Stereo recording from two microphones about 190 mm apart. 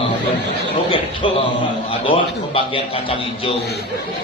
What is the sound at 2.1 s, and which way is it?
Speech, 30° left (ahead or behind).